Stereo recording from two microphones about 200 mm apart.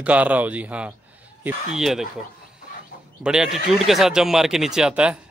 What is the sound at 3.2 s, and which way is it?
Speech, 5° right (ahead or behind).